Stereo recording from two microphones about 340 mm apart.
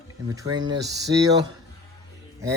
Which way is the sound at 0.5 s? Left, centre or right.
Centre.